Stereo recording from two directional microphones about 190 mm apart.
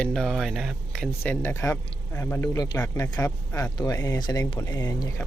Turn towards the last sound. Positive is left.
turn(degrees=20)  # may be behind; listen again after turning